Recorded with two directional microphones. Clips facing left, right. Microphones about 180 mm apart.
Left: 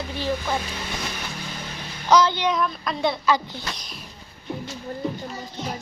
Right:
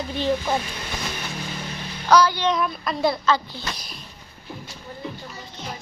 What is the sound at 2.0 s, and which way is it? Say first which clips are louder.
Speech: right 1 dB; 20° left (ahead or behind).